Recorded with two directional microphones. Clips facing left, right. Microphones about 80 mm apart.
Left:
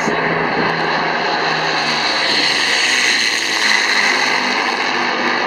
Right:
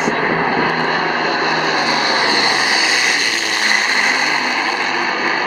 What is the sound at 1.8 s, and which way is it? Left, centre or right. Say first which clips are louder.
Vehicle: right 2 dB; centre.